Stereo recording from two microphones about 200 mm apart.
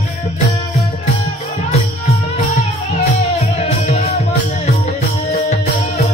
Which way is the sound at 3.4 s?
35° left (ahead or behind).